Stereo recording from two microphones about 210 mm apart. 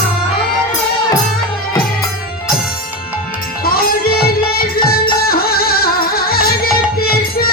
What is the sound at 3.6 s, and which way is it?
Music, 45° left (ahead or behind).